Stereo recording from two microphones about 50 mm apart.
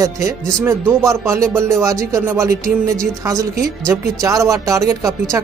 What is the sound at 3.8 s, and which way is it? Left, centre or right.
Speech, right.